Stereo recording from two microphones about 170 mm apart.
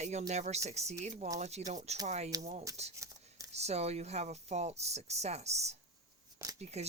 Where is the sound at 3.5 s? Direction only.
40° right (ahead or behind).